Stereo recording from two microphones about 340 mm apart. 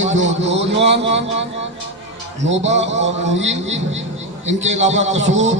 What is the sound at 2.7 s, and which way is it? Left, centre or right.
Speech, centre.